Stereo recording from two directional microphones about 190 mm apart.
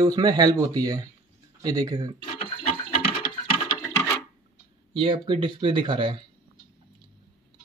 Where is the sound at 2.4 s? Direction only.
25° left (ahead or behind).